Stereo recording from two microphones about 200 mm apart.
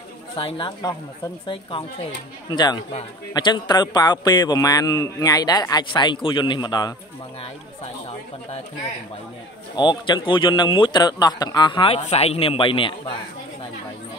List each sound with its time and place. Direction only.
0.4 s a man's voice: 25° left (ahead or behind)
9.8 s a man's voice: 20° left (ahead or behind)